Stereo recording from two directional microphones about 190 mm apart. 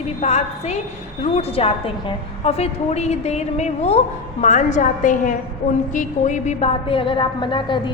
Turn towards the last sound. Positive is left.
turn(degrees=25)  # may be behind; listen again after turning